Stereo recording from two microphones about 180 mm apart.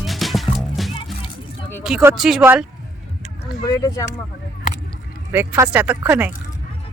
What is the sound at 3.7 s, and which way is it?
Speech, 20° left (ahead or behind).